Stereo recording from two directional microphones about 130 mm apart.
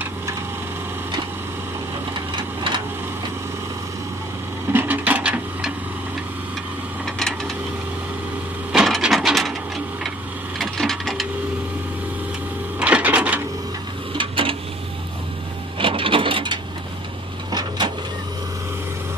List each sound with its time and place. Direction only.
4.7 s printer: 15° right (ahead or behind)
7.2 s a sound: 5° left (ahead or behind)
8.7 s wood: centre (ahead or behind)
10.6 s printer: centre (ahead or behind)
12.7 s printer: 10° right (ahead or behind)
14.1 s a sound: 40° right (ahead or behind)
15.8 s printer: 45° right (ahead or behind)